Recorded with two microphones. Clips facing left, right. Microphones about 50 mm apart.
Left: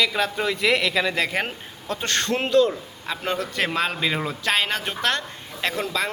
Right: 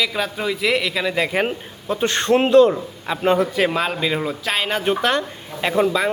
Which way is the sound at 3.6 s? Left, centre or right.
Centre.